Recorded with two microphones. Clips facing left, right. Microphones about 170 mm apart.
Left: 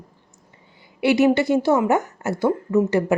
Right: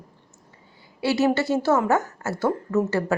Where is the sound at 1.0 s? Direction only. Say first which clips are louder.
Left 4 dB; 15° left (ahead or behind).